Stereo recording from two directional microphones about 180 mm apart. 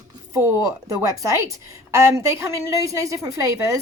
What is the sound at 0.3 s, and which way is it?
A woman's voice, 15° right (ahead or behind).